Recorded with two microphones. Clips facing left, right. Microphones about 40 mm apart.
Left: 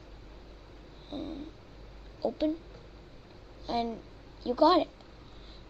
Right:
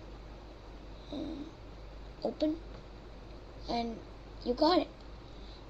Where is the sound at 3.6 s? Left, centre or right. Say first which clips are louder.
Left 3 dB; left.